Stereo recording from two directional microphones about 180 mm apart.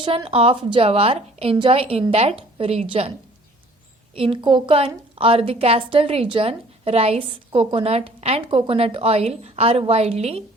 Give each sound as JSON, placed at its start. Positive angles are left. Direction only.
{"t": 0.0, "sound": "a woman's voice", "side_deg": -30}
{"t": 4.1, "sound": "a woman's voice", "side_deg": -30}